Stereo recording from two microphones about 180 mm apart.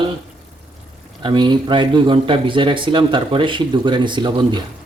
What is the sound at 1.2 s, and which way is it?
Speech, 25° right (ahead or behind).